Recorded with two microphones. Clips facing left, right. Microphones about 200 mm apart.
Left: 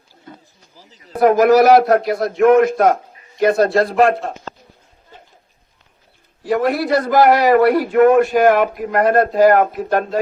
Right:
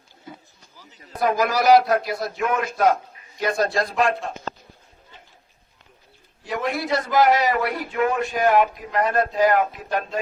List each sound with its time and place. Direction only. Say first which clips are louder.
1.2 s speech: left 10 dB; 55° left (ahead or behind)
6.5 s a man's voice: left 8 dB; 50° left (ahead or behind)
7.9 s speech: left 11 dB; 60° left (ahead or behind)
9.3 s a man's voice: left 7 dB; 45° left (ahead or behind)